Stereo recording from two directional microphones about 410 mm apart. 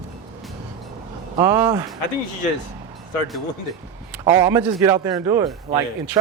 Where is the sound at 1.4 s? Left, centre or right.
Centre.